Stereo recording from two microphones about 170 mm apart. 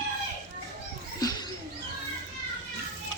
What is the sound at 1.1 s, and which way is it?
Music, 25° left (ahead or behind).